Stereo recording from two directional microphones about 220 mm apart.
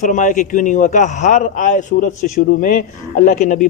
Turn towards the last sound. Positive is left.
turn(degrees=35)  # may be behind; listen again after turning